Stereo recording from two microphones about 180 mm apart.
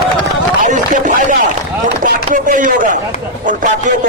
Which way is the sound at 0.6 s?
45° right (ahead or behind).